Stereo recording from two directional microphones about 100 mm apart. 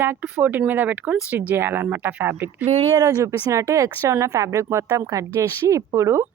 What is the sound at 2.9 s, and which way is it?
Speech, 35° right (ahead or behind).